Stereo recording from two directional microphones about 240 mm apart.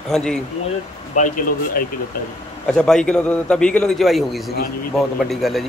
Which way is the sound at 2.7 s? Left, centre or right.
Centre.